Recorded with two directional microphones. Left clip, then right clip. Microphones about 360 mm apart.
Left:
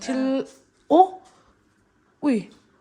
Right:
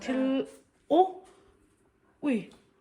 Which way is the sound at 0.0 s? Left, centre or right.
Centre.